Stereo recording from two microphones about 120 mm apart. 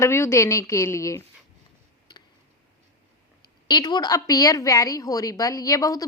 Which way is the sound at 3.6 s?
35° left (ahead or behind).